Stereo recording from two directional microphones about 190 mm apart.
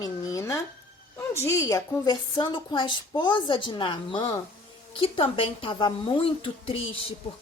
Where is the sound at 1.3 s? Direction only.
15° left (ahead or behind).